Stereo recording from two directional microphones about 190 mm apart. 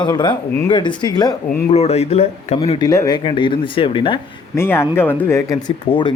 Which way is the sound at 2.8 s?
20° left (ahead or behind).